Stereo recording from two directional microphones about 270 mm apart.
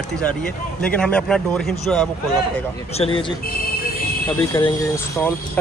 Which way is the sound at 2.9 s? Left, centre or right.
Left.